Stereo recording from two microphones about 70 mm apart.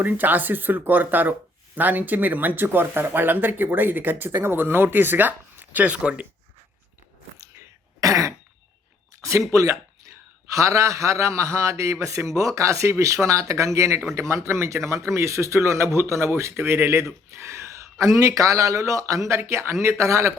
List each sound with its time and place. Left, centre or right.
0.0 s speech: right
8.0 s throat clearing: right
9.5 s a man's voice: right
19.4 s speech: right